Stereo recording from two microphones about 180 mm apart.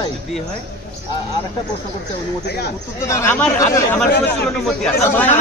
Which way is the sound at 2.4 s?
65° left (ahead or behind).